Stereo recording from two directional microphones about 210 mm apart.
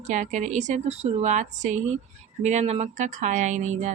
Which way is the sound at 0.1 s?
35° right (ahead or behind).